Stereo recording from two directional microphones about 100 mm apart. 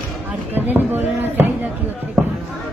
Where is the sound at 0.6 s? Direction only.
20° right (ahead or behind).